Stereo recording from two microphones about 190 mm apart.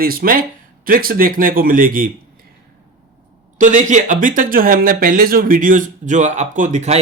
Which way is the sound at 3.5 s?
40° right (ahead or behind).